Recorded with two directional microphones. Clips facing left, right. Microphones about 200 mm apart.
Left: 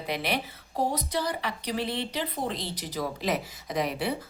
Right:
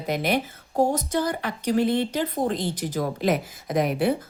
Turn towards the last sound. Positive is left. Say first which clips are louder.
# right 6 dB
turn(degrees=-50)  # may be behind; listen again after turning